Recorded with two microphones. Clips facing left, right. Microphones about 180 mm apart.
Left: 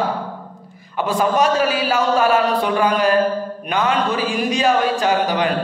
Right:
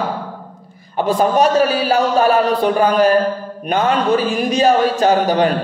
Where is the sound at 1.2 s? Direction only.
40° right (ahead or behind).